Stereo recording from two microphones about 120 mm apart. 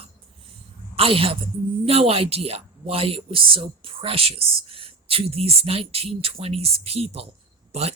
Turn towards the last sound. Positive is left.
turn(degrees=-60)  # may be behind; listen again after turning